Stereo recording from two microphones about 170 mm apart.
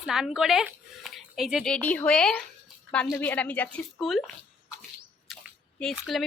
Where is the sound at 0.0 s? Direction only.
Centre (ahead or behind).